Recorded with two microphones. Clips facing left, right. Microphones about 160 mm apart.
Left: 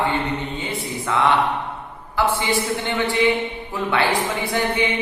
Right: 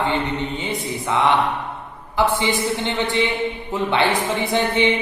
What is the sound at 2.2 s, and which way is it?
Mantra, 20° right (ahead or behind).